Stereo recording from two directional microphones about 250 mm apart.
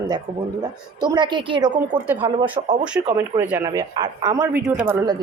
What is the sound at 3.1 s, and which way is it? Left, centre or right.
Speech, centre.